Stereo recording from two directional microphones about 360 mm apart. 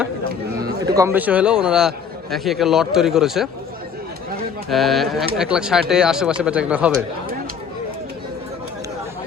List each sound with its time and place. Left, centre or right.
0.6 s a man's voice: centre
4.7 s a man's voice: centre